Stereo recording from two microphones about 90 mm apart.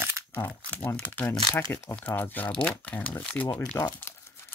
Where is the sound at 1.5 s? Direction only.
35° left (ahead or behind).